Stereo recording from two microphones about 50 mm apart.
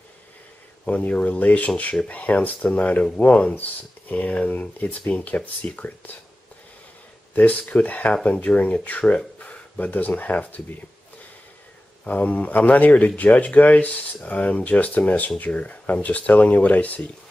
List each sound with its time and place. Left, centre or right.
0.8 s speech: left
7.3 s speech: left
12.0 s speech: left